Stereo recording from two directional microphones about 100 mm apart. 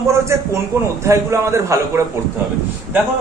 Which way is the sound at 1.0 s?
30° right (ahead or behind).